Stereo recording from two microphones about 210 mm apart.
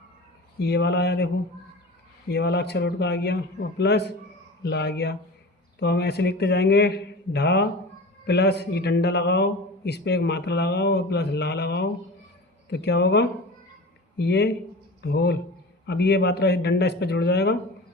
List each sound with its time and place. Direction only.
0.6 s a man's voice: 55° left (ahead or behind)
2.3 s a man's voice: 50° left (ahead or behind)